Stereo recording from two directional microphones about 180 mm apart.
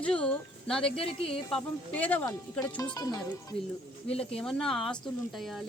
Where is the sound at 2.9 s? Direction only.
20° left (ahead or behind).